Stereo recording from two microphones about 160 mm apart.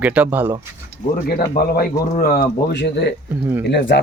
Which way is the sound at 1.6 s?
65° left (ahead or behind).